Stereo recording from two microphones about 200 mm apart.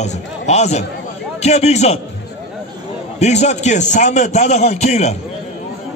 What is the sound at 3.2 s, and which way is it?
A man's voice, 35° left (ahead or behind).